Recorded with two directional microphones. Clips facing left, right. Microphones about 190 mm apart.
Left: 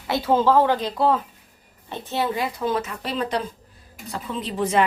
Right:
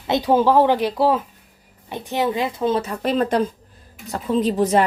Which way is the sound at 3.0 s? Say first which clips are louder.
Right 7 dB; 50° right (ahead or behind).